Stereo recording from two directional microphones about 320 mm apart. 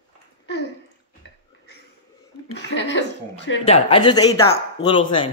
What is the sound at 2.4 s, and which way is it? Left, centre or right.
Speech, left.